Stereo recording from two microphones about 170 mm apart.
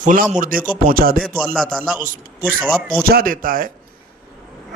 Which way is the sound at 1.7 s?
5° left (ahead or behind).